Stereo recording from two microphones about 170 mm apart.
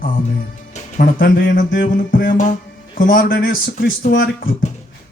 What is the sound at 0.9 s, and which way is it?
Speech, 55° left (ahead or behind).